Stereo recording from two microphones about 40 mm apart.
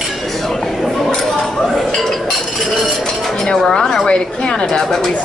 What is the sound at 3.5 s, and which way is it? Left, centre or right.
Dishes, centre.